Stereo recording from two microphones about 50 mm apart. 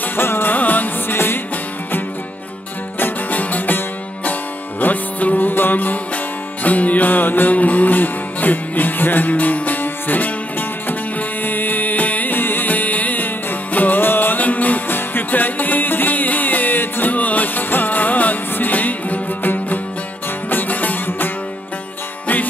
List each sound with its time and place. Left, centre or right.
0.0 s music: left
0.6 s music: left
1.1 s music: left
3.0 s music: left
17.1 s music: left